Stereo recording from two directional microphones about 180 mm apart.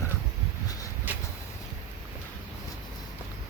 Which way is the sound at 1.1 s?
10° right (ahead or behind).